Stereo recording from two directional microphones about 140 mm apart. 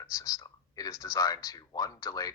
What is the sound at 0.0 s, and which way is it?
Whispering, 25° left (ahead or behind).